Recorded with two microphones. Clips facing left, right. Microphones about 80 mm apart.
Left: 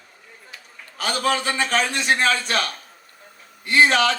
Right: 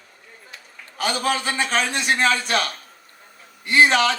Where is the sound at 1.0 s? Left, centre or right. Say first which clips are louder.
Even; right.